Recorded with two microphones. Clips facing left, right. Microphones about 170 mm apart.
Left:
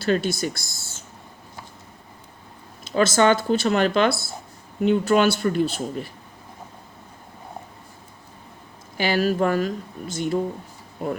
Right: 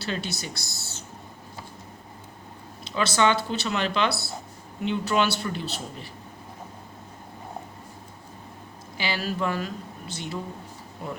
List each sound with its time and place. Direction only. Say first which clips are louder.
0.0 s speech: left 10 dB; 50° left (ahead or behind)
2.8 s speech: left 5 dB; 45° left (ahead or behind)
9.0 s speech: left 8 dB; 50° left (ahead or behind)